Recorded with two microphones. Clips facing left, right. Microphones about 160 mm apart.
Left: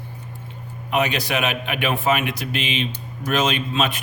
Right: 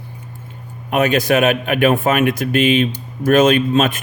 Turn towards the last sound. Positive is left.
turn(degrees=-45)  # may be behind; listen again after turning